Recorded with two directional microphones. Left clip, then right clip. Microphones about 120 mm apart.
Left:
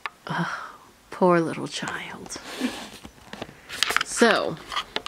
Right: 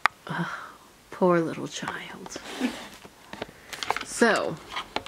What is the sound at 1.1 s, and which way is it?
Speech, 25° left (ahead or behind).